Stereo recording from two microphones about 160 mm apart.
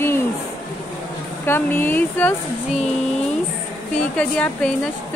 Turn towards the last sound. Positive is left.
turn(degrees=10)  # may be behind; listen again after turning